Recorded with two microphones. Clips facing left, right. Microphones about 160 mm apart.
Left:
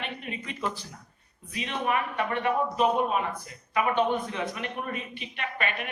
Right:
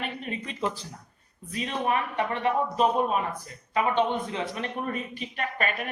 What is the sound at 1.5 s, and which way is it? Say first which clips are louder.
Speech: right 1 dB; 35° right (ahead or behind).